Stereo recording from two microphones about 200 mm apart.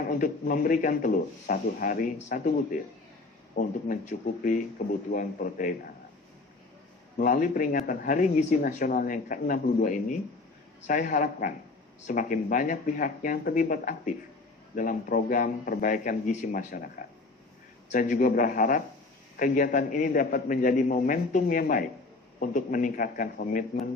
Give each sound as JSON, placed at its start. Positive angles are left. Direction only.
{"t": 0.1, "sound": "speech", "side_deg": 45}
{"t": 7.2, "sound": "speech", "side_deg": 45}
{"t": 17.9, "sound": "speech", "side_deg": 40}